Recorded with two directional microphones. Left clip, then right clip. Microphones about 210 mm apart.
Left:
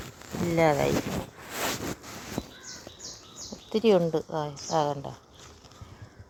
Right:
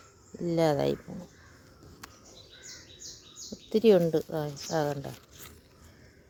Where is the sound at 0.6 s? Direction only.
10° right (ahead or behind).